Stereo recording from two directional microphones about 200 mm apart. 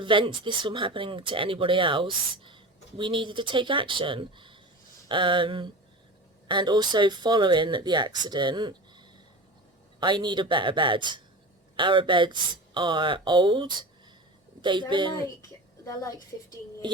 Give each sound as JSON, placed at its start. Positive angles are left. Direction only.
{"t": 0.0, "sound": "speech", "side_deg": -25}